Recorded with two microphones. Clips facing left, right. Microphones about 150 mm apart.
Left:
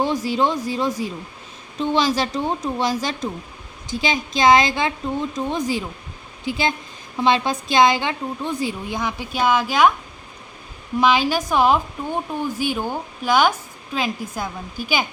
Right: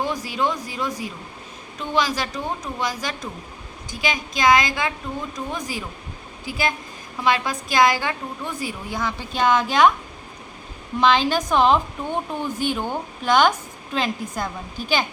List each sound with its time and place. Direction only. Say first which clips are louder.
0.0 s a woman's voice: left 4 dB; 30° left (ahead or behind); by 9.9 s 5° left (ahead or behind)
11.0 s speech: even; 10° left (ahead or behind)